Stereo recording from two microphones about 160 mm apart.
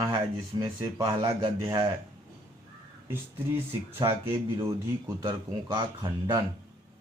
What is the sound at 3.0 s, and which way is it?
Speech, 15° right (ahead or behind).